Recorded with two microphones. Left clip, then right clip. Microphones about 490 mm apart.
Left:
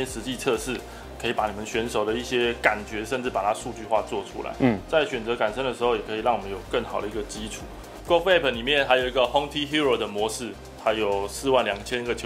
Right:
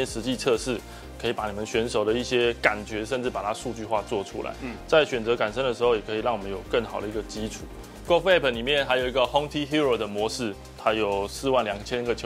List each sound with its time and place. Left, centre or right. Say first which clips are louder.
0.0 s speech: right 1 dB; right